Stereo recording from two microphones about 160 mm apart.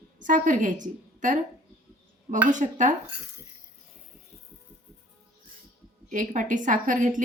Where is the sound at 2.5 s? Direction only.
50° right (ahead or behind).